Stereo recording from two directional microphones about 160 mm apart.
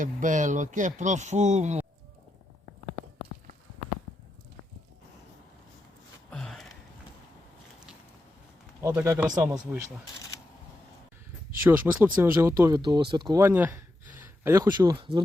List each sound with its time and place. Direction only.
0.0 s speech: 55° right (ahead or behind)
6.3 s a sound: 5° left (ahead or behind)
9.0 s speech: 10° right (ahead or behind)
11.6 s speech: 10° right (ahead or behind); by 13.4 s 30° right (ahead or behind)
13.4 s speech: 15° right (ahead or behind); by 15.2 s 30° right (ahead or behind)